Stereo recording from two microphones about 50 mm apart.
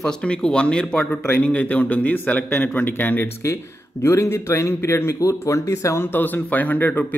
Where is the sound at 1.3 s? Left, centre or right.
Left.